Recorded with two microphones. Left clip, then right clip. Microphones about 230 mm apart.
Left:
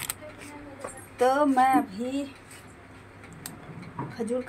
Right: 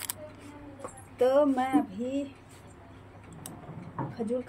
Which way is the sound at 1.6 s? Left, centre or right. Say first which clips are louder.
Left 6 dB; centre.